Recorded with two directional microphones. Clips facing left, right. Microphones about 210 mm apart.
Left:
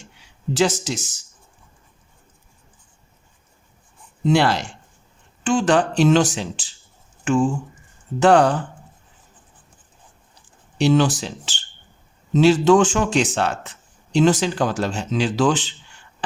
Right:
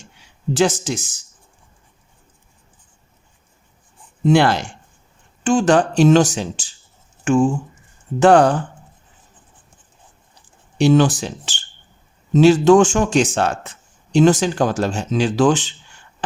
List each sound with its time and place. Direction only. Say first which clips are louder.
0.5 s speech: right 2 dB; 50° right (ahead or behind)
4.2 s speech: right 3 dB; 50° right (ahead or behind)
10.8 s speech: right 3 dB; 50° right (ahead or behind)